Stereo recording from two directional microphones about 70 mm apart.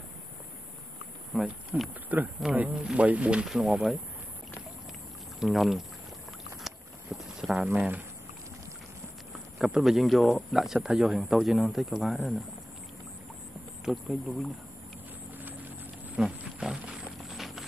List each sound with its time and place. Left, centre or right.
1.3 s speech: centre
1.7 s speech: right
3.4 s speech: centre
5.4 s speech: centre
6.6 s a sound: centre
9.6 s speech: centre
13.8 s speech: centre
15.3 s a sound: right
16.2 s wild animals: centre
17.2 s a sound: centre